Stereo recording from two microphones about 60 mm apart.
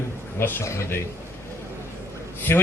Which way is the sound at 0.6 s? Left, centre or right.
Left.